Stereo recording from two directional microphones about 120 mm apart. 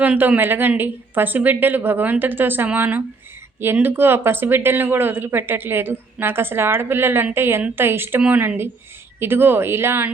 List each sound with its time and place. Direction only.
0.0 s a woman's voice: 15° right (ahead or behind)